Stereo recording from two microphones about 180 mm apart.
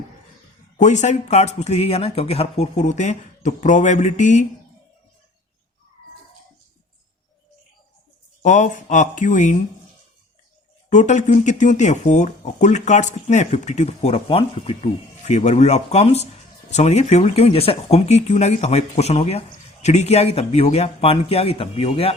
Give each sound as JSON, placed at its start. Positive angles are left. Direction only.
{"t": 0.8, "sound": "speech", "side_deg": 40}
{"t": 8.4, "sound": "speech", "side_deg": 40}
{"t": 10.8, "sound": "speech", "side_deg": 40}